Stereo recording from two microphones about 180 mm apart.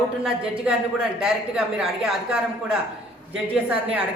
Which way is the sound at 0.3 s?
5° right (ahead or behind).